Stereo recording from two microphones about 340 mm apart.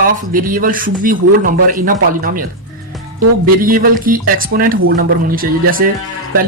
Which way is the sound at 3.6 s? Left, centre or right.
Right.